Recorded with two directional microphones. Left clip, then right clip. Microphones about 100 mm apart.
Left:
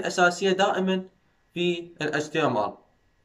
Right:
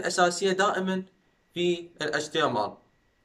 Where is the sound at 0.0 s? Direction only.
15° left (ahead or behind).